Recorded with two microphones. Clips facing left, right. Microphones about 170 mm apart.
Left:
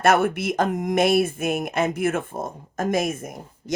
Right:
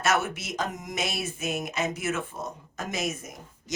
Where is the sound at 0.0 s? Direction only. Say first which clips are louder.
Left 8 dB; 55° left (ahead or behind).